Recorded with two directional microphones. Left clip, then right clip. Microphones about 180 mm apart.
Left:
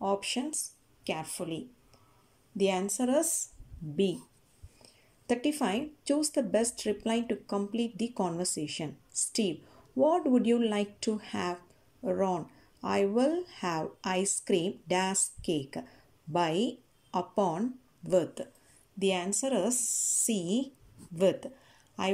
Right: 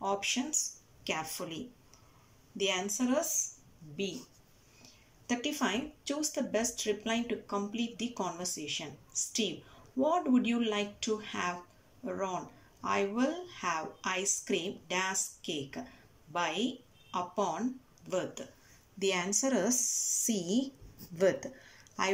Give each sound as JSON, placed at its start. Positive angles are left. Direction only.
{"t": 0.0, "sound": "speech", "side_deg": 30}
{"t": 5.2, "sound": "speech", "side_deg": 30}
{"t": 9.9, "sound": "speech", "side_deg": 30}
{"t": 18.9, "sound": "a woman's voice", "side_deg": 20}